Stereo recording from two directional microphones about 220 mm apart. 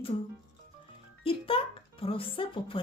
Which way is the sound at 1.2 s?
25° left (ahead or behind).